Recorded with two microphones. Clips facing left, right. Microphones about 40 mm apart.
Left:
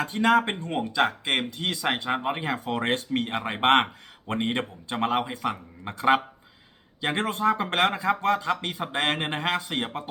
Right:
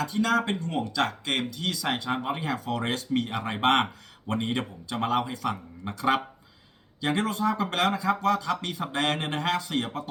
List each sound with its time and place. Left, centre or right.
0.0 s speech: left